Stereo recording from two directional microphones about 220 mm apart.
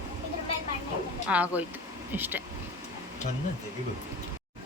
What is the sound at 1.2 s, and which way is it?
Speech, 5° right (ahead or behind).